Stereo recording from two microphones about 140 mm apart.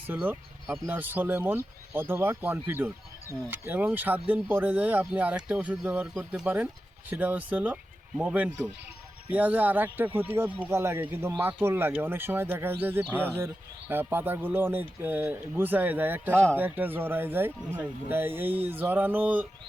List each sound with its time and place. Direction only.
0.1 s speech: 10° right (ahead or behind)